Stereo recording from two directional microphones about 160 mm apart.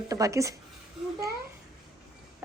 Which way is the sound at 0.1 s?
20° right (ahead or behind).